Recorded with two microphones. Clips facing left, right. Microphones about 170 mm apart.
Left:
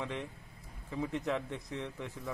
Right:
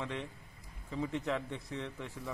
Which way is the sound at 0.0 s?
10° left (ahead or behind).